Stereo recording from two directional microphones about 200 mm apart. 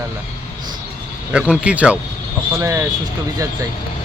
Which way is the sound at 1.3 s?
5° right (ahead or behind).